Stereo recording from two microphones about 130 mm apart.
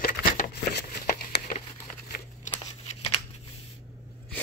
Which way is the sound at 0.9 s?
65° left (ahead or behind).